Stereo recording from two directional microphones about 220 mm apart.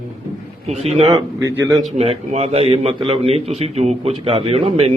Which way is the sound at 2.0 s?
30° right (ahead or behind).